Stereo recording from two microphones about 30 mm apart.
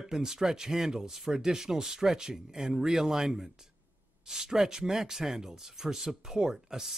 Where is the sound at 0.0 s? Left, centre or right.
Centre.